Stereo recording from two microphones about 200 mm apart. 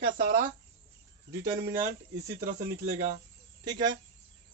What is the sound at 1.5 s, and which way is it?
Speech, 15° right (ahead or behind).